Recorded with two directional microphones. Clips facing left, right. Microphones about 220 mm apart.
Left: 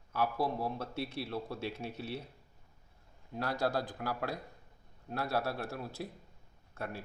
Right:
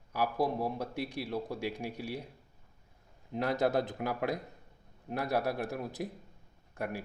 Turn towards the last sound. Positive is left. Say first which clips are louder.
# right 4 dB
turn(degrees=-15)  # may be behind; listen again after turning